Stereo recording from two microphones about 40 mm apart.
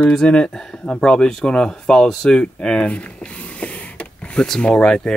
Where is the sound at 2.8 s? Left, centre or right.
Left.